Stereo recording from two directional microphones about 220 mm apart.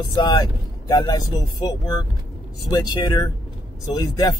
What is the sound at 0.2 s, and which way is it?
Speech, 15° left (ahead or behind).